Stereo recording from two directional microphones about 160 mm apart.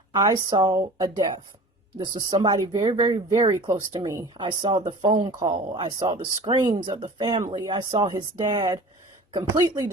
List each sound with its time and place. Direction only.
0.1 s speech: 25° right (ahead or behind)